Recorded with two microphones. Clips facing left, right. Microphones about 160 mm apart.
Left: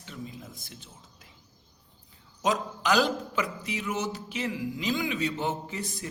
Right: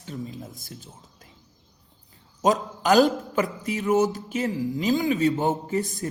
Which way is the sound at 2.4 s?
45° right (ahead or behind).